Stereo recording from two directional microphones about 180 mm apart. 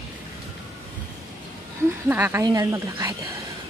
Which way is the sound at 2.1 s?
10° right (ahead or behind).